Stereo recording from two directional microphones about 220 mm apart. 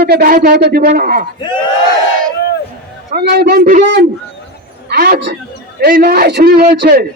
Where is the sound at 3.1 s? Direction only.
50° right (ahead or behind).